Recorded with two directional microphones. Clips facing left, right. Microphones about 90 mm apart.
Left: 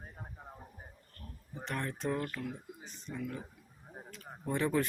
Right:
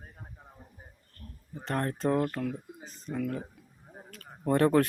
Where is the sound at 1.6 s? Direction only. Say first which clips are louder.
Right 7 dB; 45° right (ahead or behind).